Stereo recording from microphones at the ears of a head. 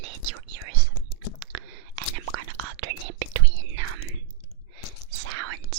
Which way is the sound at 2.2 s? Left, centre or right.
Right.